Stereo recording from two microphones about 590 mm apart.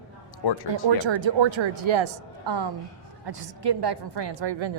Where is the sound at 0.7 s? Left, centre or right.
Right.